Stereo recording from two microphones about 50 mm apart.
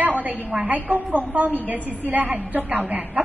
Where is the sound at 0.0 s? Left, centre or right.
Right.